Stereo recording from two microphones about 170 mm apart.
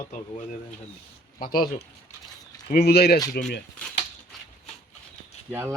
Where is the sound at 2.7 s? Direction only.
75° left (ahead or behind).